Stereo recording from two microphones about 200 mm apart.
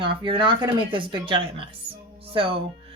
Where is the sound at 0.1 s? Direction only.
25° right (ahead or behind).